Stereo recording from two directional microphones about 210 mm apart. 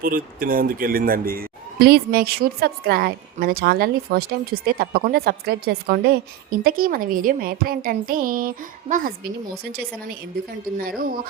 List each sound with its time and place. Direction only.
0.0 s a man's voice: 40° right (ahead or behind)
10.8 s a man's voice: 45° right (ahead or behind)